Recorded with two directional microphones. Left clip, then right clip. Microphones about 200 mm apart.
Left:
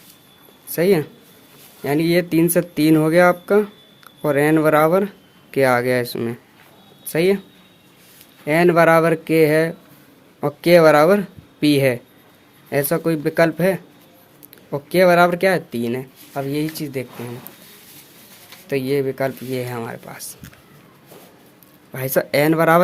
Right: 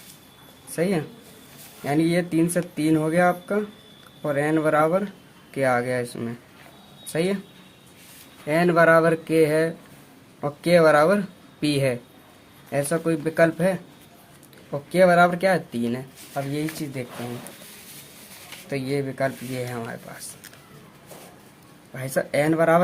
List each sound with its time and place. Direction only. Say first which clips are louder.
0.8 s speech: left 8 dB; 45° left (ahead or behind)
8.4 s speech: left 4 dB; 35° left (ahead or behind)
18.7 s speech: left 7 dB; 45° left (ahead or behind)
21.9 s speech: left 5 dB; 50° left (ahead or behind)